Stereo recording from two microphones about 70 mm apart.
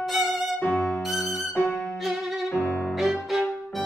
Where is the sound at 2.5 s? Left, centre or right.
Left.